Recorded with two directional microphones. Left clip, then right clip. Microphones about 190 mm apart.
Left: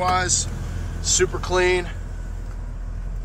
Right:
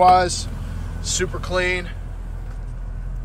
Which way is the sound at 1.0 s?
5° left (ahead or behind).